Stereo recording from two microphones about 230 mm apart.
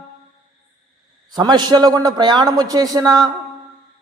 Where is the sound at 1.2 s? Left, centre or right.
Centre.